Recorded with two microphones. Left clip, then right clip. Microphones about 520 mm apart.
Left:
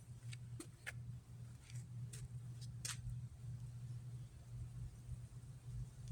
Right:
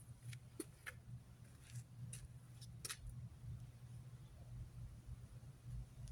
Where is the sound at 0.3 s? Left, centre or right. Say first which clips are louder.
Right 3 dB; right.